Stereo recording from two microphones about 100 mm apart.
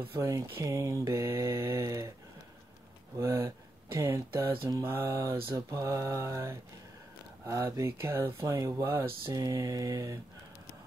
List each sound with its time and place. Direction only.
0.1 s mantra: 30° right (ahead or behind)
3.2 s speech: 30° right (ahead or behind)
4.8 s mantra: 25° right (ahead or behind)
7.4 s speech: 30° right (ahead or behind)